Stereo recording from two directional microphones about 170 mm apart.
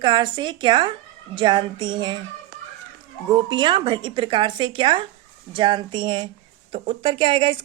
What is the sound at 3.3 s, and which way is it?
A woman's voice, 25° right (ahead or behind).